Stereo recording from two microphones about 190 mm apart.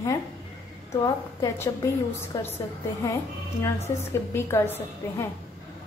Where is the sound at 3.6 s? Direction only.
15° left (ahead or behind).